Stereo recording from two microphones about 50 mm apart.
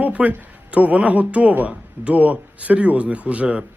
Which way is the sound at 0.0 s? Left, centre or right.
Right.